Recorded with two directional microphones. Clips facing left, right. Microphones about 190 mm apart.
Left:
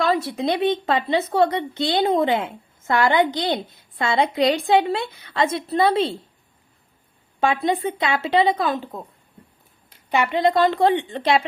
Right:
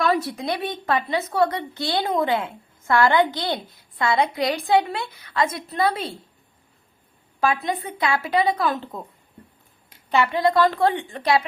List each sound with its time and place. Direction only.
0.0 s speech: 25° left (ahead or behind)
7.3 s speech: 25° left (ahead or behind)
10.1 s speech: 20° left (ahead or behind)